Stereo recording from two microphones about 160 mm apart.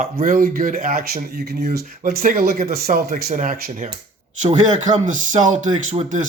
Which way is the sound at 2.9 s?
50° right (ahead or behind).